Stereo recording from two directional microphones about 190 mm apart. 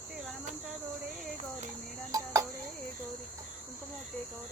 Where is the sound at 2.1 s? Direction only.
20° right (ahead or behind).